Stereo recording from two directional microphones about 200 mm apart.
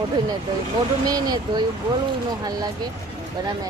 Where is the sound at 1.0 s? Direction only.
20° right (ahead or behind).